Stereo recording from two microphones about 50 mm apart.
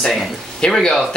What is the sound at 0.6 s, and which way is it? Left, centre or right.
Speech, centre.